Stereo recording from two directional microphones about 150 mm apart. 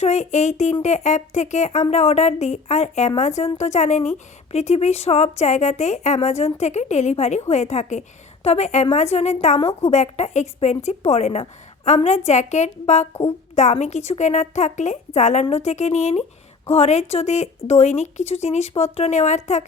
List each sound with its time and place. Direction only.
0.0 s a woman's voice: 50° left (ahead or behind)